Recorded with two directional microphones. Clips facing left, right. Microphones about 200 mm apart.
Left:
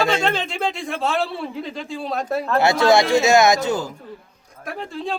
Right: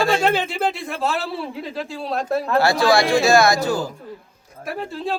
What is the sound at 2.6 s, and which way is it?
Speech, 20° left (ahead or behind).